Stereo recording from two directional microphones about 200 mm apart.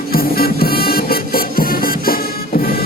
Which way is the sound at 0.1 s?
50° left (ahead or behind).